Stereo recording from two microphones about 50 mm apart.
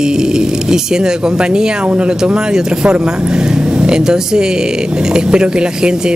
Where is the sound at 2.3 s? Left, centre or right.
Centre.